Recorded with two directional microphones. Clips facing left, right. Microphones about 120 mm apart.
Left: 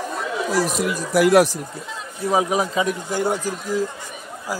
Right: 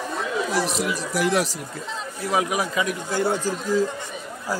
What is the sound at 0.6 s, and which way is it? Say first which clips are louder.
Speech: left 3 dB; 50° left (ahead or behind).